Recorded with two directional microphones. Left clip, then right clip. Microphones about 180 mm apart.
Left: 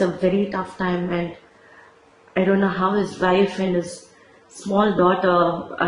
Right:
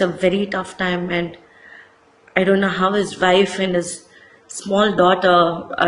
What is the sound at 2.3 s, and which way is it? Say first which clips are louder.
A woman's voice: right 3 dB; 5° right (ahead or behind).